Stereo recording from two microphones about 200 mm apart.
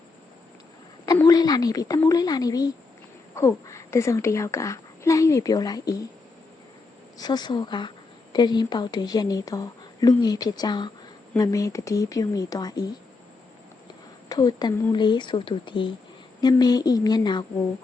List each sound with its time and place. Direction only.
1.0 s speech: 20° left (ahead or behind)
7.2 s speech: 20° left (ahead or behind)
14.3 s speech: 20° left (ahead or behind)